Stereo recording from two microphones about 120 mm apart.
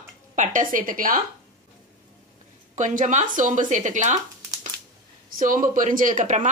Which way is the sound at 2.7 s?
90° right.